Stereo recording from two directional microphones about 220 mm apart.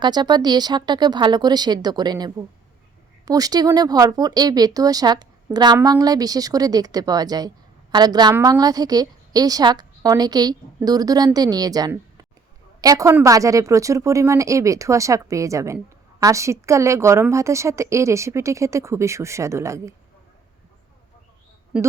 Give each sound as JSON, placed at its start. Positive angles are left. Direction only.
{"t": 0.0, "sound": "speech", "side_deg": -20}